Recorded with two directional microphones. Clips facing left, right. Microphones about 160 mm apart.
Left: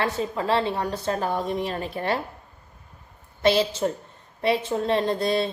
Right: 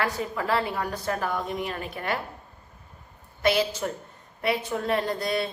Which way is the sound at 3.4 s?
30° left (ahead or behind).